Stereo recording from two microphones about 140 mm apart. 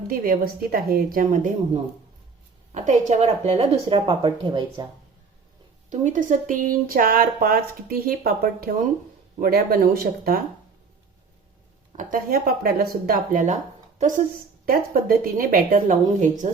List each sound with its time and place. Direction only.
0.1 s speech: 90° right; by 1.5 s 70° right (ahead or behind)
2.7 s a woman's voice: 60° right (ahead or behind); by 4.9 s 35° right (ahead or behind)
5.9 s speech: 65° right (ahead or behind); by 10.4 s 90° right
11.9 s speech: 85° right; by 14.3 s 65° right (ahead or behind)
14.7 s speech: 90° right
15.7 s speech: 65° right (ahead or behind)